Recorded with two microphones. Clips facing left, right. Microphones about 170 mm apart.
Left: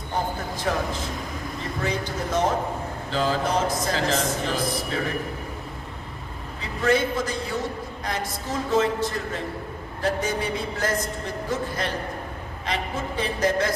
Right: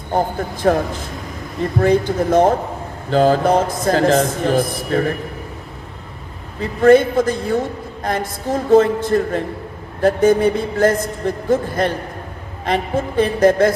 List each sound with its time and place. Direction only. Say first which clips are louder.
0.1 s speech: right 8 dB; 55° right (ahead or behind)
1.8 s speech: right 13 dB; 55° right (ahead or behind)
6.6 s speech: right 11 dB; 50° right (ahead or behind)